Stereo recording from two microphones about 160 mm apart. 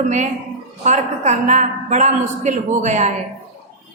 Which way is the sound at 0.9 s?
45° right (ahead or behind).